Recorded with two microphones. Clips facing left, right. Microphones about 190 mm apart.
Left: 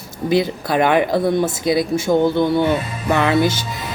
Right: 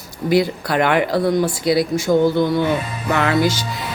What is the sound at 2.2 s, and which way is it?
Speech, 55° left (ahead or behind).